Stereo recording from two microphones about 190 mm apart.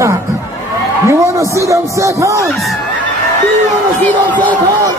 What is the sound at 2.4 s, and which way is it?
Speech, centre (ahead or behind).